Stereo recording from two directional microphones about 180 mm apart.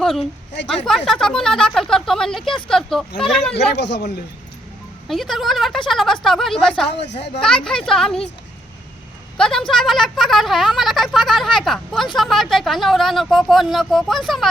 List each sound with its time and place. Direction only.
0.0 s a woman's voice: centre (ahead or behind)
3.5 s speech: 70° left (ahead or behind)
5.0 s a woman's voice: centre (ahead or behind)
6.9 s speech: 70° left (ahead or behind)
7.4 s a woman's voice: 5° left (ahead or behind)
9.4 s a woman's voice: centre (ahead or behind)